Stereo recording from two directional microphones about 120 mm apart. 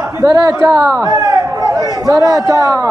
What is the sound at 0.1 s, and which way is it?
A man's voice, 30° right (ahead or behind).